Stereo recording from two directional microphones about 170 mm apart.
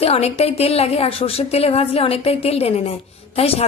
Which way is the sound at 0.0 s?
35° left (ahead or behind).